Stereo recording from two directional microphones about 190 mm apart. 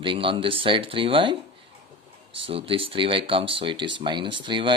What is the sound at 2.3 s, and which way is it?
Speech, 30° right (ahead or behind).